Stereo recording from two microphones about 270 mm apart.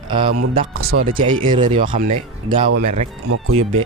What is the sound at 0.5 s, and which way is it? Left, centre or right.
Speech, right.